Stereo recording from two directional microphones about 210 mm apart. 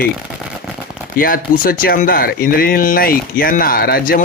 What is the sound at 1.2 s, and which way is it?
A man's voice, 40° left (ahead or behind).